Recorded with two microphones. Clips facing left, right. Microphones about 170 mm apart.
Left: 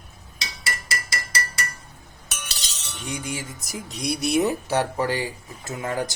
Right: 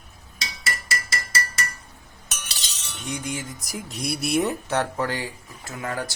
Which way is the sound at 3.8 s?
Centre (ahead or behind).